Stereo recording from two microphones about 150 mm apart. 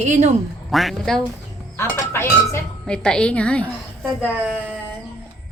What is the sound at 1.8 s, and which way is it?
Speech, 15° left (ahead or behind).